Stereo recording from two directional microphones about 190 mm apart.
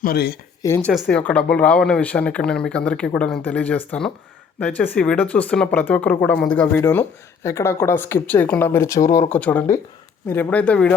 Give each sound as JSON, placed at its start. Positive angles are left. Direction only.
{"t": 0.0, "sound": "speech", "side_deg": 55}
{"t": 0.9, "sound": "speech", "side_deg": 5}